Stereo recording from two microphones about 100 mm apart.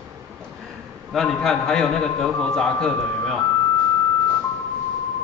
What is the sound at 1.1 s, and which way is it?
A man's voice, 5° left (ahead or behind).